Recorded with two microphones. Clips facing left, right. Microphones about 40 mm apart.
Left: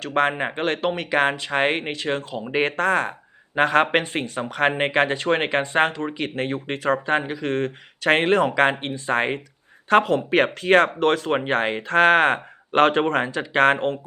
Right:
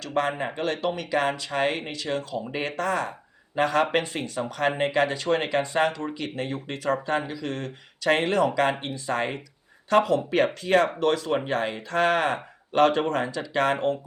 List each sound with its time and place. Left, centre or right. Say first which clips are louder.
0.0 s speech: left 5 dB; left